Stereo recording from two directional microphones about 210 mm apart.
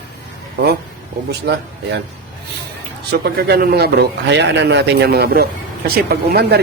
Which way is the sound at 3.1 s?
50° right (ahead or behind).